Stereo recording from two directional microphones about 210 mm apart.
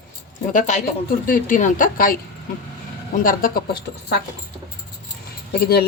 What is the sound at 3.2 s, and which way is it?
Speech, 40° left (ahead or behind).